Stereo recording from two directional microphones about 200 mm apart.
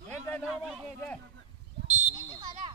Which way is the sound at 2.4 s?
20° right (ahead or behind).